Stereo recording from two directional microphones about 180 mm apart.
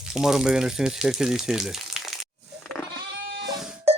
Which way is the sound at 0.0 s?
5° right (ahead or behind).